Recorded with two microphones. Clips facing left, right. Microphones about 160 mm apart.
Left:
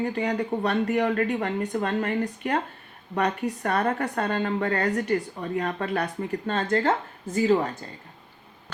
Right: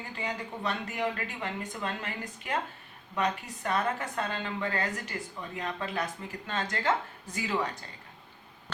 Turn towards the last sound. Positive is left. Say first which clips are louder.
# left 10 dB
turn(degrees=35)  # may be behind; listen again after turning